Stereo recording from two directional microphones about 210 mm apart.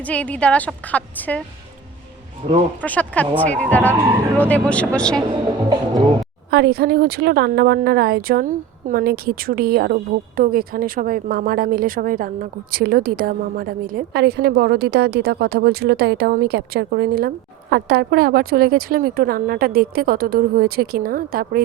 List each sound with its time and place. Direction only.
0.0 s a woman's voice: 5° left (ahead or behind)
2.4 s speech: 30° right (ahead or behind)
2.8 s a woman's voice: 5° left (ahead or behind)
6.5 s speech: 50° right (ahead or behind)